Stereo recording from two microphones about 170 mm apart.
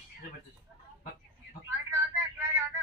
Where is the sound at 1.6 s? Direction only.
15° right (ahead or behind).